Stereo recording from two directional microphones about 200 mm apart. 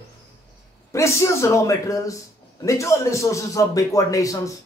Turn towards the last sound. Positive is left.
turn(degrees=15)  # may be behind; listen again after turning